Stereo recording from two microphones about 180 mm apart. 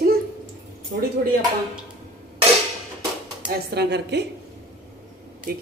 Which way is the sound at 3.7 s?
65° right (ahead or behind).